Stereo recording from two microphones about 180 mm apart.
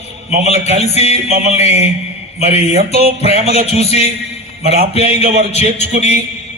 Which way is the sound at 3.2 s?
35° left (ahead or behind).